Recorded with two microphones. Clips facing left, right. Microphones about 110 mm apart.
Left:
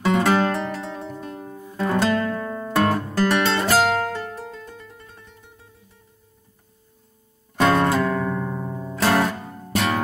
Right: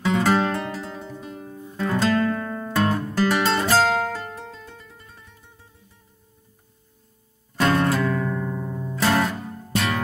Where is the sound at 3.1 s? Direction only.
Centre (ahead or behind).